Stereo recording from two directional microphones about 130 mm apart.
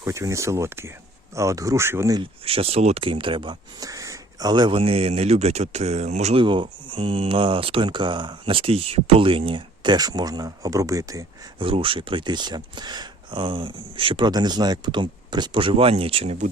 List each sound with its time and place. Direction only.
0.0 s speech: 20° right (ahead or behind)
2.4 s speech: 50° right (ahead or behind)
4.8 s speech: 50° right (ahead or behind)
6.3 s speech: 40° right (ahead or behind)
11.6 s speech: 40° right (ahead or behind)